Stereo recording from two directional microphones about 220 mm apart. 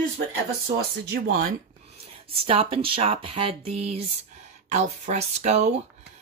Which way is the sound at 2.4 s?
25° right (ahead or behind).